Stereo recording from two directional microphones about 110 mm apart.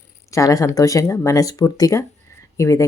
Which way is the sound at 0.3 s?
30° left (ahead or behind).